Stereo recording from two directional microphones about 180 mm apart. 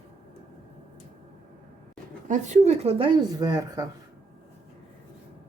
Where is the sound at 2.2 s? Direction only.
40° right (ahead or behind); by 3.9 s 20° right (ahead or behind).